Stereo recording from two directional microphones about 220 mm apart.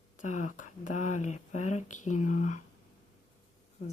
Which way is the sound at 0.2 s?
35° left (ahead or behind).